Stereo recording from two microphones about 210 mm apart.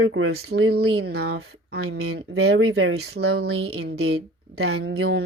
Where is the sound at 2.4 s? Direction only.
60° right (ahead or behind).